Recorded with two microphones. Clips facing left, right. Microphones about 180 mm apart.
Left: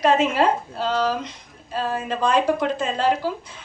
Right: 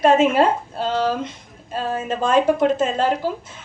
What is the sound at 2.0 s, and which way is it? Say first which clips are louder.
A woman's voice: right 3 dB; 45° right (ahead or behind).